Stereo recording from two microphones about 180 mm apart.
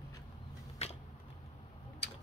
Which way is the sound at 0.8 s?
35° left (ahead or behind).